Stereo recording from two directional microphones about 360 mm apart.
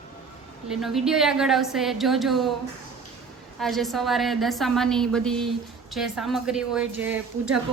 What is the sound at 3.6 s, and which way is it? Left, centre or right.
A woman's voice, centre.